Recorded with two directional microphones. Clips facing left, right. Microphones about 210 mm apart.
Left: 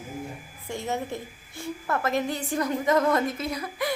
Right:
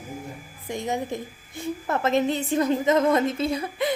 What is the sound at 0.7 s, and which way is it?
A woman's voice, 15° right (ahead or behind).